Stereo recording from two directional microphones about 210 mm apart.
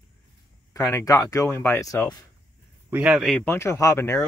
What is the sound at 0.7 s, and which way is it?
Speech, 15° left (ahead or behind).